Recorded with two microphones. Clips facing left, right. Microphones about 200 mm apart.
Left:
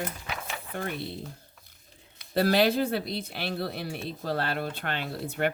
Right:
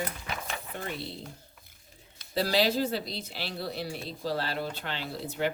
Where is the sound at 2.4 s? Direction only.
55° left (ahead or behind).